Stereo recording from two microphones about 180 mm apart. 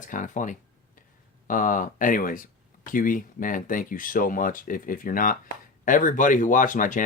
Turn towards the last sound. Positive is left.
turn(degrees=45)  # may be behind; listen again after turning